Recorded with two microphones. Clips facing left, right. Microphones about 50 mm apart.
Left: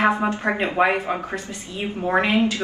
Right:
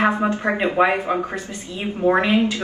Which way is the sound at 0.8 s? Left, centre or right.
Centre.